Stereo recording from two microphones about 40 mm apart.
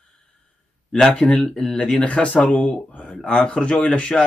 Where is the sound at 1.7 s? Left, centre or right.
Left.